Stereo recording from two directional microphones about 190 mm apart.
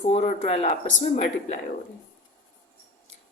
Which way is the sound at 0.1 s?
35° left (ahead or behind).